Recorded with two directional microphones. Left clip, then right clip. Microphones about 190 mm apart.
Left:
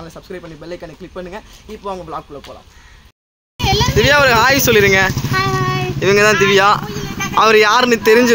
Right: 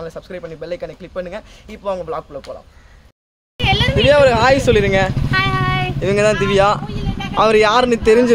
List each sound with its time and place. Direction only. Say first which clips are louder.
0.0 s speech: right 3 dB; 25° right (ahead or behind)
3.6 s speech: even; 15° right (ahead or behind)
5.3 s child singing: even; 20° right (ahead or behind)
6.0 s speech: left 5 dB; 5° right (ahead or behind)